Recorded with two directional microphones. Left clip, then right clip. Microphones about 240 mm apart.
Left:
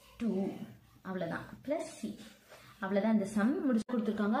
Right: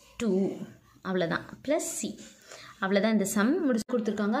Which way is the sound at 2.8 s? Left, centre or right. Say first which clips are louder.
Right 6 dB; right.